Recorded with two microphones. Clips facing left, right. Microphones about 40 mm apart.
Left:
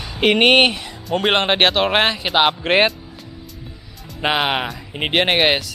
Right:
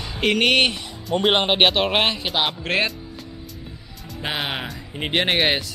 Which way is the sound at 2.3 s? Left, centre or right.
Left.